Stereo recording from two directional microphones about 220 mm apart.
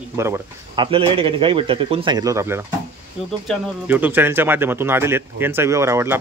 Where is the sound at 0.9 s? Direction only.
25° right (ahead or behind).